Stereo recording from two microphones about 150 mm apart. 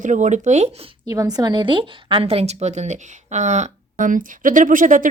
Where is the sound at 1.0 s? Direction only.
20° right (ahead or behind).